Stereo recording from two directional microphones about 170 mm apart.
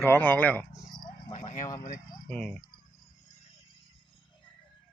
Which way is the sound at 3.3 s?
40° left (ahead or behind).